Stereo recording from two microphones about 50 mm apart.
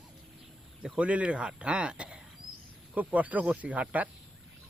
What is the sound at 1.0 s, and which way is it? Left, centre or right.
Speech, right.